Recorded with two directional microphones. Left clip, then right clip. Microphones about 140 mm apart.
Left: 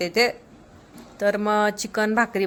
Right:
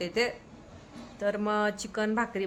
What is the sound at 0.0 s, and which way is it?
Speech, 30° left (ahead or behind).